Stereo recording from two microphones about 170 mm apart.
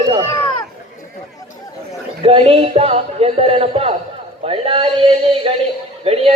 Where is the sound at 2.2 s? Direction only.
35° right (ahead or behind).